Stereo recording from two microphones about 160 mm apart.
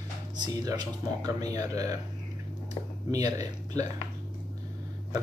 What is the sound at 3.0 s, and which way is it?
Speech, 20° right (ahead or behind).